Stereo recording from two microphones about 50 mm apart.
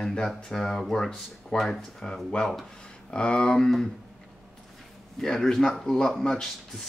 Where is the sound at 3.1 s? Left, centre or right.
Centre.